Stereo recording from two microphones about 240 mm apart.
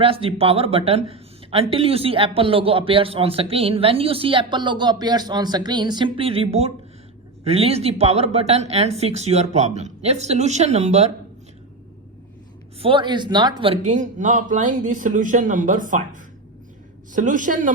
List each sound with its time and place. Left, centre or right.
0.0 s speech: right
12.8 s a man's voice: right